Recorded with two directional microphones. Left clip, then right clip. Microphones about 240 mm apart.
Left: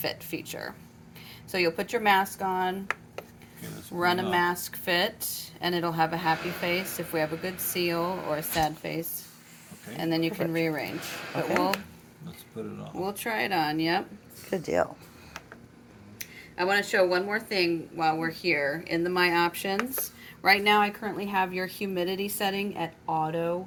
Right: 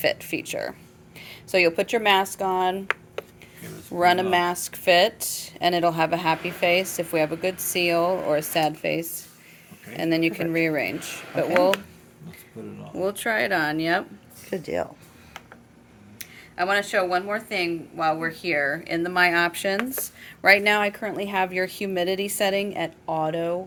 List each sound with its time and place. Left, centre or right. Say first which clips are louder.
0.0 s speech: right 9 dB; right
3.9 s speech: right 6 dB; right
12.6 s speech: left 2 dB; centre
13.0 s speech: right 6 dB; right
14.5 s speech: left 1 dB; centre
16.1 s speech: right 3 dB; right